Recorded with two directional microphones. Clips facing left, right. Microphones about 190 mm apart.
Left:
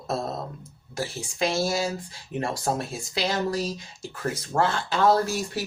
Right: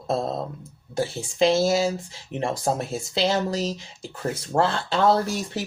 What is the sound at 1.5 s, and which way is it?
Speech, 25° right (ahead or behind).